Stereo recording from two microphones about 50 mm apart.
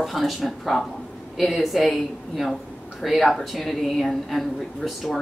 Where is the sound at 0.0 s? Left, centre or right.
Centre.